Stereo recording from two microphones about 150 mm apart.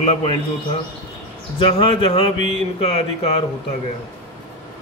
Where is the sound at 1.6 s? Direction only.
35° left (ahead or behind).